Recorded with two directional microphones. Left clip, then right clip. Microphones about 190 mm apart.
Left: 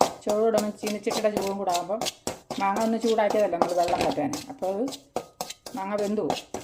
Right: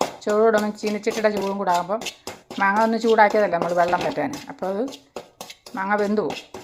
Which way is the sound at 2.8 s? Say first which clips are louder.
Right 9 dB; 5° right (ahead or behind).